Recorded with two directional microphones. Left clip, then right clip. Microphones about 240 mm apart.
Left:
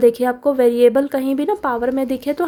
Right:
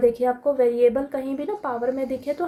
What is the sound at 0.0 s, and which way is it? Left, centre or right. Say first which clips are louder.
A woman's voice: left 5 dB; left.